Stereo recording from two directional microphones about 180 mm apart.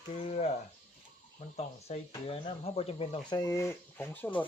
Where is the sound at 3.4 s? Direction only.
15° left (ahead or behind).